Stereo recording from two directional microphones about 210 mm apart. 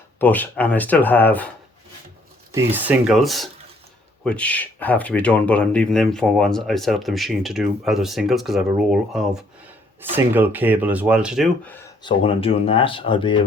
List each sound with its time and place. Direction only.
0.2 s speech: 10° left (ahead or behind)
2.7 s speech: 5° right (ahead or behind)
12.0 s speech: 25° left (ahead or behind)